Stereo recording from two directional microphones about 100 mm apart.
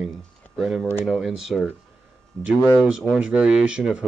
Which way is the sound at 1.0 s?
Centre (ahead or behind).